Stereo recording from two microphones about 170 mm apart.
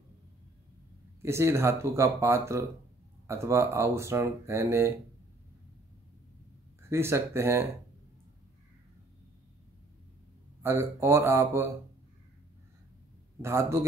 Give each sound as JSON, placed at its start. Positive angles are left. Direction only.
{"t": 1.2, "sound": "speech", "side_deg": -15}
{"t": 6.8, "sound": "speech", "side_deg": -15}
{"t": 10.6, "sound": "speech", "side_deg": -15}
{"t": 13.4, "sound": "speech", "side_deg": -15}